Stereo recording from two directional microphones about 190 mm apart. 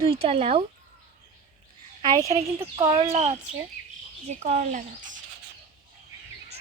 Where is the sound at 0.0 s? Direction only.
30° right (ahead or behind).